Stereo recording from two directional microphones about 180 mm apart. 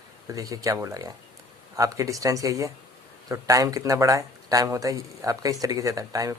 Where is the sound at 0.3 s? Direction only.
20° right (ahead or behind).